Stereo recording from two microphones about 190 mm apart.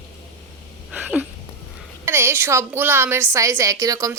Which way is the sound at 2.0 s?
10° right (ahead or behind).